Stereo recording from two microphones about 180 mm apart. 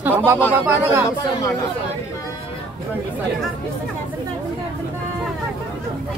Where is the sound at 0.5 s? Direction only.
10° right (ahead or behind).